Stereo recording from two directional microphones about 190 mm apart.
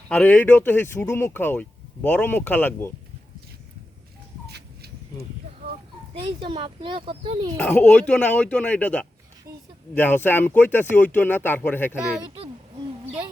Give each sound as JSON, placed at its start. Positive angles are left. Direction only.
{"t": 0.1, "sound": "speech", "side_deg": 10}
{"t": 4.4, "sound": "a sound", "side_deg": -60}
{"t": 6.4, "sound": "speech", "side_deg": -30}
{"t": 7.5, "sound": "speech", "side_deg": 10}
{"t": 9.5, "sound": "a sound", "side_deg": -20}
{"t": 9.9, "sound": "speech", "side_deg": 10}